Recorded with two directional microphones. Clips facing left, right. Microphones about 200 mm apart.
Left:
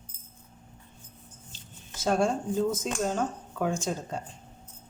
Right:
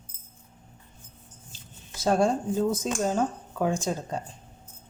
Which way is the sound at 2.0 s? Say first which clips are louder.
Right 3 dB; 35° right (ahead or behind).